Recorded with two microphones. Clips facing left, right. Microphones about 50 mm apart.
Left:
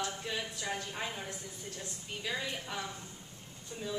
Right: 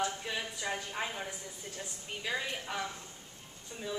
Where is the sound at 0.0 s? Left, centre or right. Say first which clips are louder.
Right 2 dB; centre.